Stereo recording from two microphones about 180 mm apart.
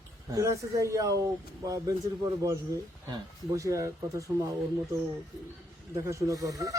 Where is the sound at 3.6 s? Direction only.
15° right (ahead or behind).